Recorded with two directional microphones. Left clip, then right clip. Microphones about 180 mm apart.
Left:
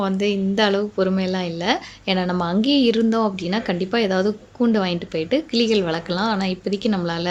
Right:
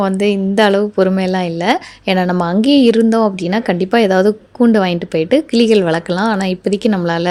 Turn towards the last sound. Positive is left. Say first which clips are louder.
# right 8 dB
turn(degrees=-45)  # may be behind; listen again after turning